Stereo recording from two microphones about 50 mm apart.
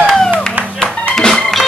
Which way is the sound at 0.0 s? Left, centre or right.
Centre.